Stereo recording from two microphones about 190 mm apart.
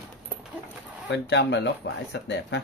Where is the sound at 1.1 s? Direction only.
65° left (ahead or behind).